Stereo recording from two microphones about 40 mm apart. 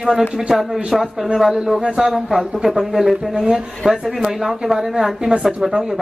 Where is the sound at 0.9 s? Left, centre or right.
Centre.